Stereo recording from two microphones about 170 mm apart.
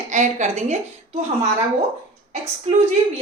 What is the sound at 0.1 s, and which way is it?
Speech, 45° right (ahead or behind).